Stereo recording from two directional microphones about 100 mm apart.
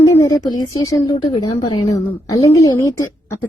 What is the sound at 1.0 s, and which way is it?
Speech, 45° left (ahead or behind).